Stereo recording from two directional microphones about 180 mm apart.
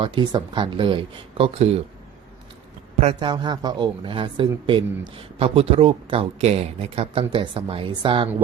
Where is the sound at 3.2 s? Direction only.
25° right (ahead or behind).